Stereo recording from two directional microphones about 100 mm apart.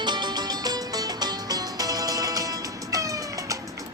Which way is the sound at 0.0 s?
50° right (ahead or behind).